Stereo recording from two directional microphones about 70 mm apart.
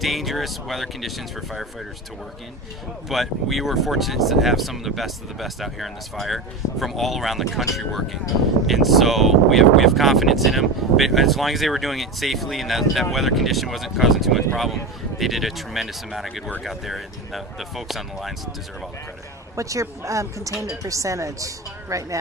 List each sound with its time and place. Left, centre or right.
0.0 s speech: centre
3.1 s speech: centre
19.5 s a woman's voice: right